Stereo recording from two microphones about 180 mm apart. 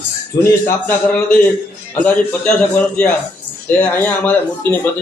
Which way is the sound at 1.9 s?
5° left (ahead or behind).